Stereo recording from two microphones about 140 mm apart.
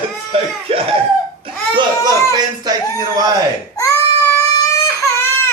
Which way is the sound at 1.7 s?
30° right (ahead or behind).